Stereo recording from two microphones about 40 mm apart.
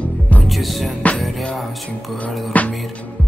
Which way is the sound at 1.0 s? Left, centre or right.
Left.